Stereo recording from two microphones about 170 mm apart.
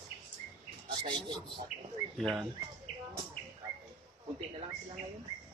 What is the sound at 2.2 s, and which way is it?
Speech, centre (ahead or behind).